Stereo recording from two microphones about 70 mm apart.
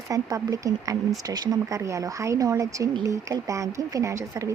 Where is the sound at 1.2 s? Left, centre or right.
Right.